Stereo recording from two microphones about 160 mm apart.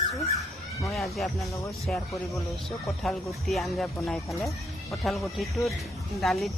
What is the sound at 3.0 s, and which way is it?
Speech, centre (ahead or behind).